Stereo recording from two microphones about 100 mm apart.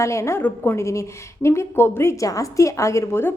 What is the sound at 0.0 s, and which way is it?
A woman's voice, 30° left (ahead or behind).